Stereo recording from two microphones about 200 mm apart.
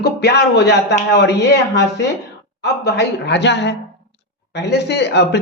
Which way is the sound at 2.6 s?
55° left (ahead or behind).